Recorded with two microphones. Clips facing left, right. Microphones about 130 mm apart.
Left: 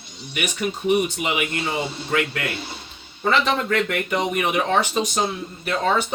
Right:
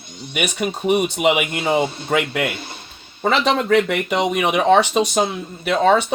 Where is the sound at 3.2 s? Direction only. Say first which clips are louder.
Right 3 dB; 70° right (ahead or behind).